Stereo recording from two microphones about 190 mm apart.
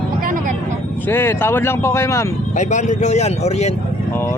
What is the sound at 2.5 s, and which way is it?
Speech, 40° left (ahead or behind).